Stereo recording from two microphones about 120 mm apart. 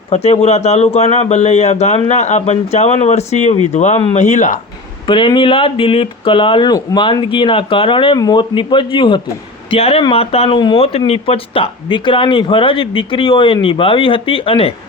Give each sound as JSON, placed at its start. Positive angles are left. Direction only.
{"t": 0.1, "sound": "a man's voice", "side_deg": 60}
{"t": 5.0, "sound": "speech", "side_deg": 40}